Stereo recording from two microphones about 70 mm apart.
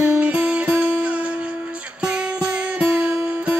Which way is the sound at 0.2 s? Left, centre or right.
Centre.